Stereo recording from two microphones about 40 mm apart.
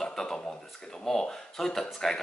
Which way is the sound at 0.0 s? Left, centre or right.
Centre.